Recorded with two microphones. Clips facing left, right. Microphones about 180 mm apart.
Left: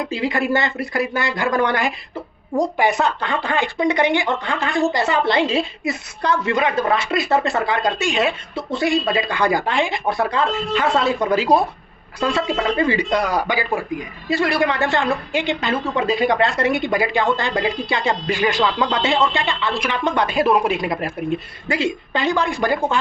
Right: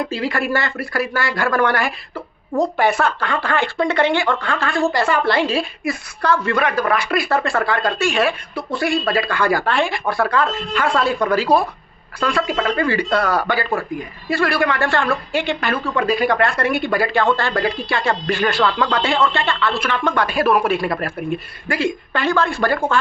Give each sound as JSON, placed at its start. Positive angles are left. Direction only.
{"t": 0.0, "sound": "speech", "side_deg": 20}